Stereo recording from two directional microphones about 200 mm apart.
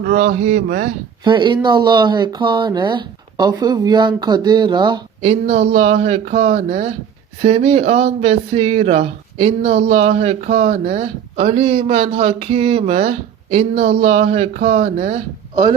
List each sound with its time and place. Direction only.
0.0 s speech: 40° right (ahead or behind)
1.2 s speech: 25° right (ahead or behind)
5.2 s speech: 35° right (ahead or behind)